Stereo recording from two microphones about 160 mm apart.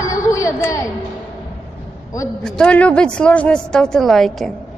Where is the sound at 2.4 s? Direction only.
5° left (ahead or behind).